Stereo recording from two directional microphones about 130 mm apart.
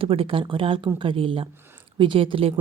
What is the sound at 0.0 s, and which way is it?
A woman's voice, 45° right (ahead or behind).